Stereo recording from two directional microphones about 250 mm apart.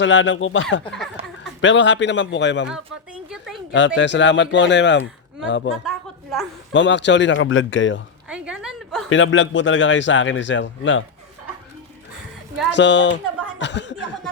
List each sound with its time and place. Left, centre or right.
0.0 s speech: left
0.9 s speech: centre
1.6 s speech: left
3.2 s a sound: centre
3.7 s speech: left
6.7 s speech: left
8.3 s a sound: centre
9.0 s speech: left
12.7 s speech: left